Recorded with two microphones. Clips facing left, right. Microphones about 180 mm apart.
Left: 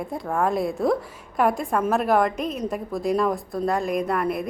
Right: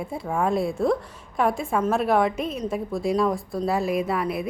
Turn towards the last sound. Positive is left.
turn(degrees=0)  # may be behind; listen again after turning